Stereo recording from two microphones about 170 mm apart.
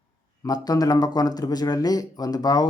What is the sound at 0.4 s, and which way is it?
Speech, 20° left (ahead or behind).